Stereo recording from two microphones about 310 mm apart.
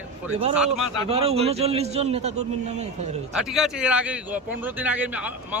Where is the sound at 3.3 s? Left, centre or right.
Centre.